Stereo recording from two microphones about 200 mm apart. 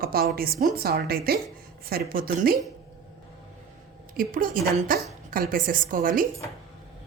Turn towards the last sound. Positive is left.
turn(degrees=-45)  # may be behind; listen again after turning